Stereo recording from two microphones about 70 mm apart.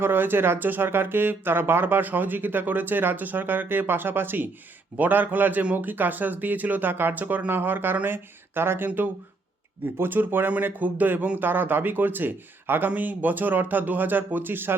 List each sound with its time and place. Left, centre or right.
0.0 s speech: right